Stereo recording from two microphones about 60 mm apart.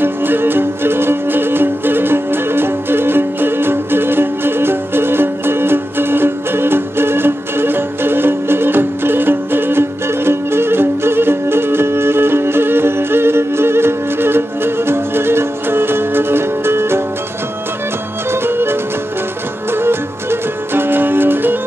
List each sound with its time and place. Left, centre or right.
0.0 s music: right
18.3 s music: right